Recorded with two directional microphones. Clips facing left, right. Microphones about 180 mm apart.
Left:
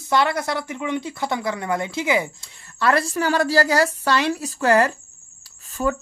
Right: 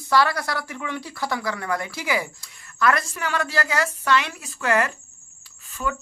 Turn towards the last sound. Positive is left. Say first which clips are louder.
# left 6 dB
turn(degrees=35)  # may be behind; listen again after turning